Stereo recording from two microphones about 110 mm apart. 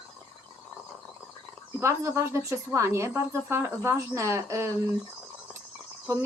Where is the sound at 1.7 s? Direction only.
25° right (ahead or behind).